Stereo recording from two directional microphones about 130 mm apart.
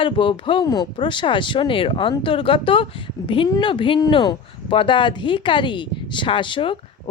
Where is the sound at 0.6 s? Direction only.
30° left (ahead or behind).